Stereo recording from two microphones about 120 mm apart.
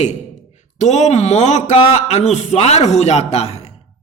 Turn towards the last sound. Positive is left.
turn(degrees=60)  # may be behind; listen again after turning